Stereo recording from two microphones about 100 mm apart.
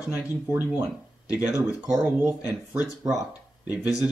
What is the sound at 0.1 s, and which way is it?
Speech, 20° right (ahead or behind).